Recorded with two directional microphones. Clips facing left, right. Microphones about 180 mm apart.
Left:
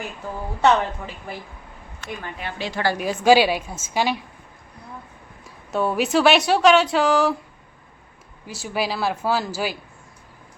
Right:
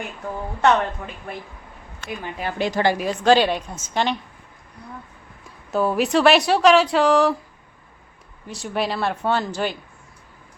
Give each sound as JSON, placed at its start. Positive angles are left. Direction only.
{"t": 0.6, "sound": "a woman's voice", "side_deg": 5}
{"t": 2.4, "sound": "a woman's voice", "side_deg": -45}
{"t": 3.0, "sound": "a woman's voice", "side_deg": 5}
{"t": 5.7, "sound": "a woman's voice", "side_deg": 0}
{"t": 8.4, "sound": "a woman's voice", "side_deg": 5}